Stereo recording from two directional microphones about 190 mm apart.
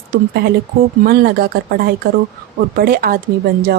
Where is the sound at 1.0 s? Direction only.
55° right (ahead or behind).